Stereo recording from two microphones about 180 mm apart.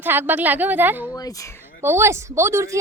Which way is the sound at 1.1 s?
20° left (ahead or behind).